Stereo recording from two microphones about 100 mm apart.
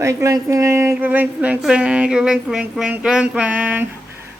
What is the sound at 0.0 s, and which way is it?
Child singing, 30° right (ahead or behind).